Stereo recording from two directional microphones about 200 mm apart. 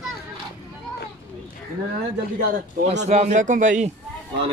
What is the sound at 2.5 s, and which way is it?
A man's voice, 35° right (ahead or behind).